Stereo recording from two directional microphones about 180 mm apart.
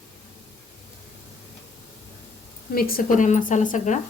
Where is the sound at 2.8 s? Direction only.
55° left (ahead or behind).